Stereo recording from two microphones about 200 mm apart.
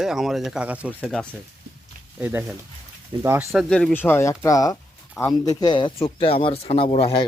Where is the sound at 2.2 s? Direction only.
10° right (ahead or behind).